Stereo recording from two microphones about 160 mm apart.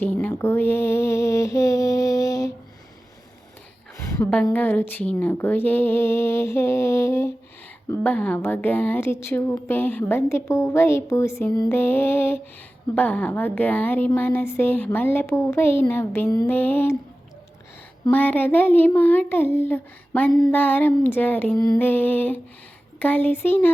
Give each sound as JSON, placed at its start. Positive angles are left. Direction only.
{"t": 0.0, "sound": "a sound", "side_deg": 10}
{"t": 4.1, "sound": "a woman's voice", "side_deg": 10}
{"t": 18.1, "sound": "a woman's voice", "side_deg": 10}